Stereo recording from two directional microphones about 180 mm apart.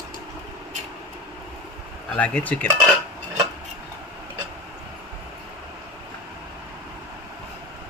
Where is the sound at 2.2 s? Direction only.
10° left (ahead or behind).